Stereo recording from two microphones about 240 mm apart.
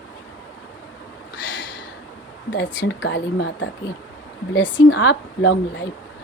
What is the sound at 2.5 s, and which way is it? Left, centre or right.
A woman's voice, left.